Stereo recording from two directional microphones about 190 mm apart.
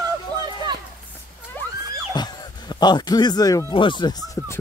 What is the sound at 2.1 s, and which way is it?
Speech, 20° left (ahead or behind).